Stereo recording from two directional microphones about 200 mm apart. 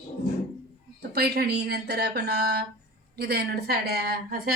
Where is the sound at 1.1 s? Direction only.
50° right (ahead or behind).